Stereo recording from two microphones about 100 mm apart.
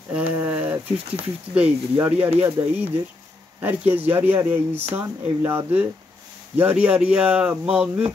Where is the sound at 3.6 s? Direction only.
20° right (ahead or behind).